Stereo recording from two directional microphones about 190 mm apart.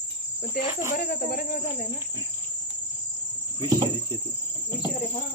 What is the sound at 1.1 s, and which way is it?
Speech, 50° left (ahead or behind).